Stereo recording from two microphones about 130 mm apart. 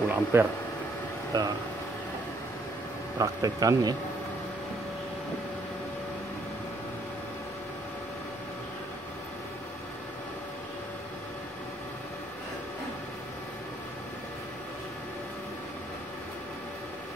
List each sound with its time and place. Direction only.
0.1 s speech: 15° right (ahead or behind)
1.3 s speech: 30° right (ahead or behind)
3.2 s speech: 25° right (ahead or behind)